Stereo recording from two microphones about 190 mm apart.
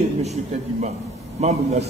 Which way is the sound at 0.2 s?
35° right (ahead or behind).